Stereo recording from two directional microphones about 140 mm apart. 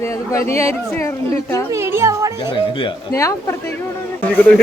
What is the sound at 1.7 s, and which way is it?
Speech, 20° right (ahead or behind).